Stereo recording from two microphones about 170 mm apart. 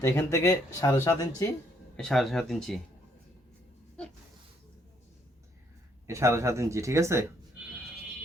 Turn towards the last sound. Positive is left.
turn(degrees=-15)  # may be behind; listen again after turning